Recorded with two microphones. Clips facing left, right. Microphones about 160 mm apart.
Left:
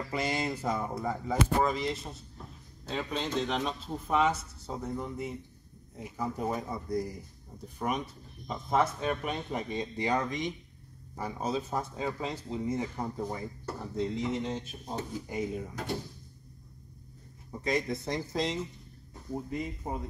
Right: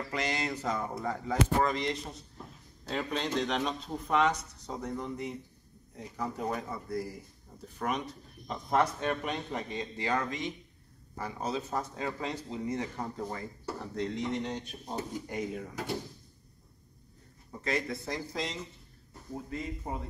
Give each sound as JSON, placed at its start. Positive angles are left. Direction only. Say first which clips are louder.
{"t": 0.1, "sound": "speech", "louder": "left 2 dB", "side_deg": 10}
{"t": 17.5, "sound": "speech", "louder": "left 2 dB", "side_deg": 15}
{"t": 19.5, "sound": "speech", "louder": "left 2 dB", "side_deg": 15}